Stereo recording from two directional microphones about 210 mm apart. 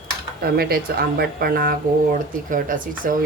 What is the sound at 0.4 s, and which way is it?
Speech, 45° right (ahead or behind).